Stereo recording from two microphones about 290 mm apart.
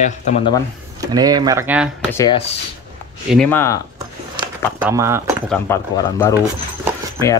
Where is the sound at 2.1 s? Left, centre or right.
Centre.